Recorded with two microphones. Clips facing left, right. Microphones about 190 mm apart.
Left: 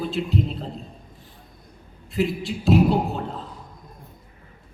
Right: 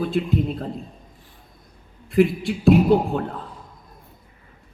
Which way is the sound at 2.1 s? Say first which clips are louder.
Right 6 dB; 55° right (ahead or behind).